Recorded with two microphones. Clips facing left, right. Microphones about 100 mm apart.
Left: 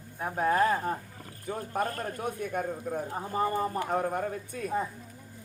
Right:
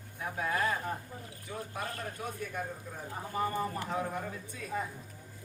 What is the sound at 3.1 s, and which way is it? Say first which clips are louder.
Speech: left 2 dB; 35° left (ahead or behind).